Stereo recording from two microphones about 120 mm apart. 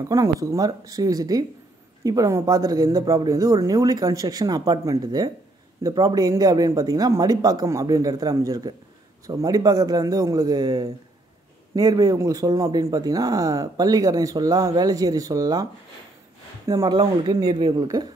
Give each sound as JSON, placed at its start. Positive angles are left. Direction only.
{"t": 0.0, "sound": "speech", "side_deg": -30}
{"t": 17.0, "sound": "speech", "side_deg": -45}